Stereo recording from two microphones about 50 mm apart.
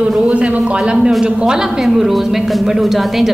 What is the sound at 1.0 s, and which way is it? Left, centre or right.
Speech, centre.